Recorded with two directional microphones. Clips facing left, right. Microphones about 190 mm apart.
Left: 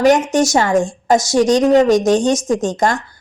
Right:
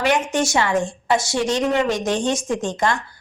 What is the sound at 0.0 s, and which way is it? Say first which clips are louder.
A woman's voice: left 7 dB; 40° left (ahead or behind).